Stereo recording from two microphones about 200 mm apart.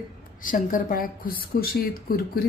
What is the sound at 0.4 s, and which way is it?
A woman's voice, 40° left (ahead or behind).